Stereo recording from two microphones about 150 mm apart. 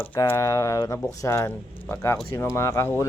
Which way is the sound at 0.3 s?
20° left (ahead or behind).